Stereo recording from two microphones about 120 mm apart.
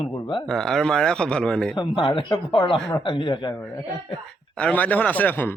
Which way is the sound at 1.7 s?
40° left (ahead or behind).